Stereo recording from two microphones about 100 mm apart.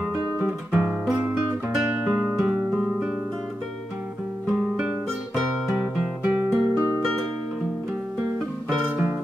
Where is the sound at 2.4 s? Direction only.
10° right (ahead or behind).